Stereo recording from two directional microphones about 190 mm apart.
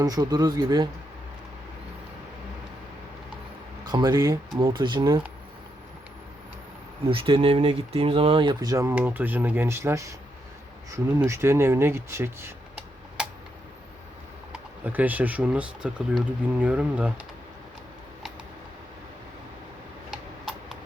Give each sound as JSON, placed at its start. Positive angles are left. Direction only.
{"t": 0.0, "sound": "speech", "side_deg": -20}
{"t": 3.8, "sound": "speech", "side_deg": -20}
{"t": 7.1, "sound": "speech", "side_deg": -30}
{"t": 14.5, "sound": "speech", "side_deg": -10}
{"t": 20.1, "sound": "tick-tock", "side_deg": 0}